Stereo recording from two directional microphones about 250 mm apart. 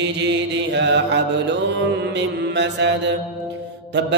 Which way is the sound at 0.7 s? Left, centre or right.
Right.